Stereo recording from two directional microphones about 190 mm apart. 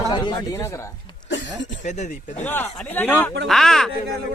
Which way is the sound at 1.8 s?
40° left (ahead or behind).